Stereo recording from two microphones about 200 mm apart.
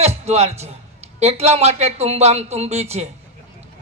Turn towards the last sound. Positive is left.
turn(degrees=-30)  # may be behind; listen again after turning